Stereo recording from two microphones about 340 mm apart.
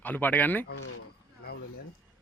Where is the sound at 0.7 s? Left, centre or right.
Left.